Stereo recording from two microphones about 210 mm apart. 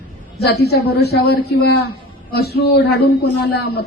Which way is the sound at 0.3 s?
50° left (ahead or behind).